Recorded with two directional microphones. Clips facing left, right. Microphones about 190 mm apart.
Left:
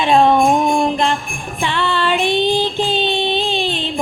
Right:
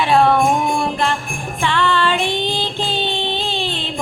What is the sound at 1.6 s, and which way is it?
Female singing, 15° left (ahead or behind).